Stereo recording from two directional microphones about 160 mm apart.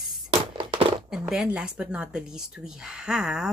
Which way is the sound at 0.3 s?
35° right (ahead or behind).